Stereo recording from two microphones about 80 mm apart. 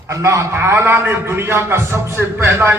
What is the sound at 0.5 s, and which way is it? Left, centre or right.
Music, right.